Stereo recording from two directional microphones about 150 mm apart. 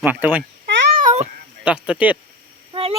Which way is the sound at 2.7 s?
40° right (ahead or behind).